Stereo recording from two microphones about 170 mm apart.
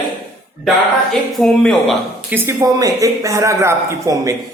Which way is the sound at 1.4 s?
5° left (ahead or behind).